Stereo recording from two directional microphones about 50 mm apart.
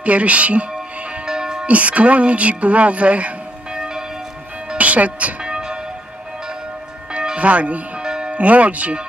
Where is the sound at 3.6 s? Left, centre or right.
Centre.